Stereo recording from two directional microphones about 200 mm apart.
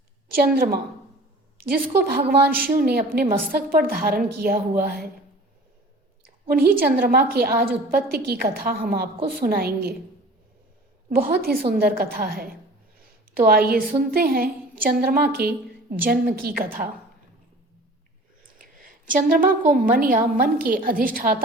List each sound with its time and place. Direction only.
0.3 s a woman's voice: 50° right (ahead or behind)
6.5 s a woman's voice: 50° right (ahead or behind)
11.1 s a woman's voice: 50° right (ahead or behind)
18.6 s a woman's voice: 45° right (ahead or behind)